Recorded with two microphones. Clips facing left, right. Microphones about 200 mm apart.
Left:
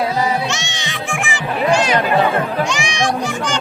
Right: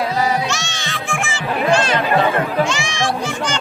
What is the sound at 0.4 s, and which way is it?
Music, 20° left (ahead or behind).